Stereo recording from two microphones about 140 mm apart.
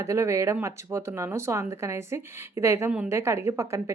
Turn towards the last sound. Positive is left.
turn(degrees=-20)  # may be behind; listen again after turning